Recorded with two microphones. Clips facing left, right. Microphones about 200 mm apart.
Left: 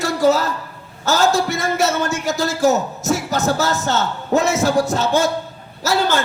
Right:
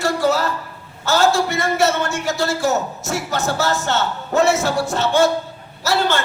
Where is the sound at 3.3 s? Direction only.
40° left (ahead or behind).